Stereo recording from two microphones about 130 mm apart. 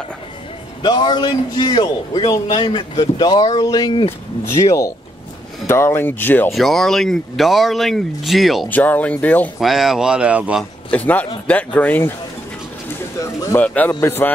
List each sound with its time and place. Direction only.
0.8 s a man's voice: 30° left (ahead or behind); by 6.5 s 15° left (ahead or behind)
6.5 s speech: centre (ahead or behind)
8.6 s speech: 15° left (ahead or behind)
9.6 s speech: centre (ahead or behind)
10.6 s speech: 10° left (ahead or behind)
13.2 s speech: 25° left (ahead or behind)